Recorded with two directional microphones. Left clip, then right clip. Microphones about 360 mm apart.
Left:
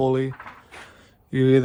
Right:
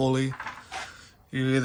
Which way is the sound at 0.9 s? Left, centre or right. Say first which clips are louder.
Left 7 dB; centre.